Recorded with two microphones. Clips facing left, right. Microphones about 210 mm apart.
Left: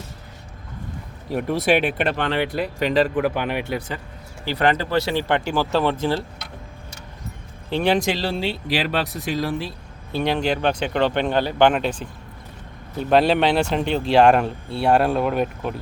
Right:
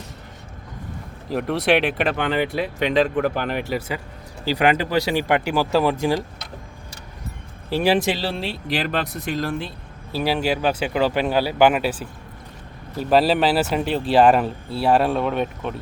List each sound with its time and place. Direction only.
1.3 s speech: centre (ahead or behind)
3.7 s speech: 5° right (ahead or behind)
7.7 s speech: 5° right (ahead or behind)